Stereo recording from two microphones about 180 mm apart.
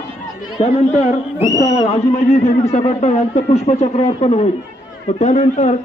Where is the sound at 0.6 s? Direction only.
35° left (ahead or behind).